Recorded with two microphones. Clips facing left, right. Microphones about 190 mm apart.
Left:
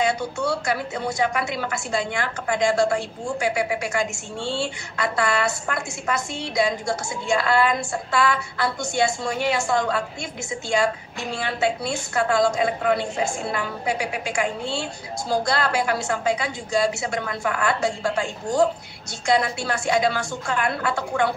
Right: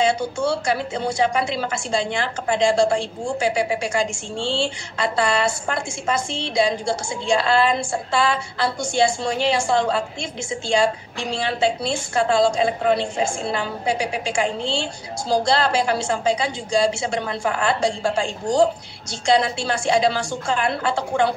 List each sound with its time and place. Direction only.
0.4 s a woman's voice: 25° right (ahead or behind)
7.3 s a woman's voice: 30° right (ahead or behind)